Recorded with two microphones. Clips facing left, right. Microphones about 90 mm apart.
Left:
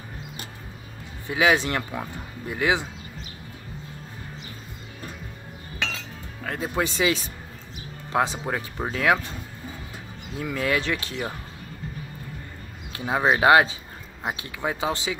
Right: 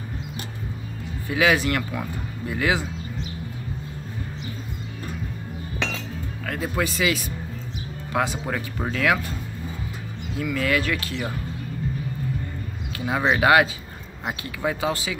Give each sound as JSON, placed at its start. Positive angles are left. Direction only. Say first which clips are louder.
{"t": 1.2, "sound": "speech", "louder": "even", "side_deg": 25}
{"t": 6.4, "sound": "music", "louder": "right 1 dB", "side_deg": 20}
{"t": 6.8, "sound": "speech", "louder": "left 1 dB", "side_deg": 25}
{"t": 10.4, "sound": "speech", "louder": "right 2 dB", "side_deg": 25}
{"t": 12.9, "sound": "speech", "louder": "even", "side_deg": 25}